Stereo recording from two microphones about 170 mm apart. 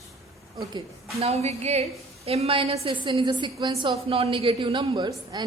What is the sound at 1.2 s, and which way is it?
A woman's voice, 40° right (ahead or behind).